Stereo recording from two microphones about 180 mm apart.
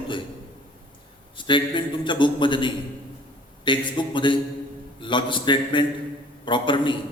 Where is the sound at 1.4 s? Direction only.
25° left (ahead or behind).